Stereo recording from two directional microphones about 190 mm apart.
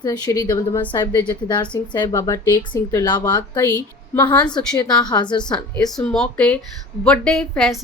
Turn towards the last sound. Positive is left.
turn(degrees=0)  # may be behind; listen again after turning